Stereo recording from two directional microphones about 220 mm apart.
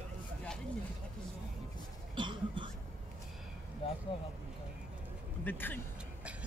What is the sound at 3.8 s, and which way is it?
Vehicle, 25° left (ahead or behind).